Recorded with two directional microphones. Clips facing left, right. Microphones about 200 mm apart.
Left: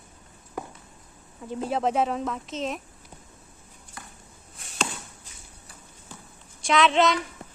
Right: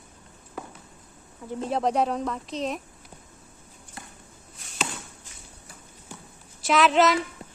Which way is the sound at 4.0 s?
25° right (ahead or behind).